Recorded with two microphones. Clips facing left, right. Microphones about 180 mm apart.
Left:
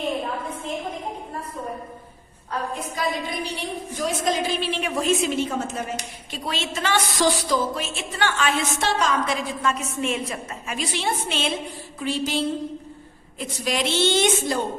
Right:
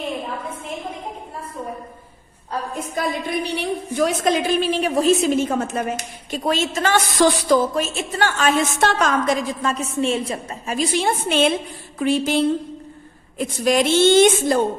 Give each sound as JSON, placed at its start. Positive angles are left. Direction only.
{"t": 2.9, "sound": "a woman's voice", "side_deg": -60}
{"t": 11.9, "sound": "a sound", "side_deg": -55}
{"t": 13.7, "sound": "a woman's voice", "side_deg": -45}